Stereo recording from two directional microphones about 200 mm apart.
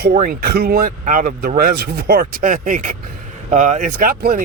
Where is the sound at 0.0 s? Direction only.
45° right (ahead or behind).